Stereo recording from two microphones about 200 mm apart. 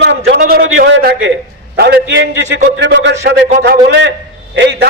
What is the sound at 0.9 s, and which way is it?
A man's voice, 60° right (ahead or behind).